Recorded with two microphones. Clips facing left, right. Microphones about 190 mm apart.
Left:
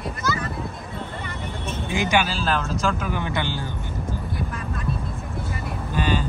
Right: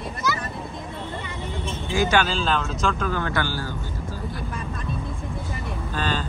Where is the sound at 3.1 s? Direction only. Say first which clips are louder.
Right 1 dB; 20° left (ahead or behind).